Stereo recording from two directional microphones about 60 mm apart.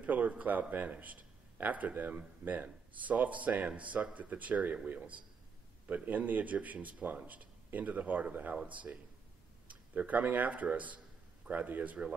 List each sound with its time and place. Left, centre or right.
0.0 s a man's voice: right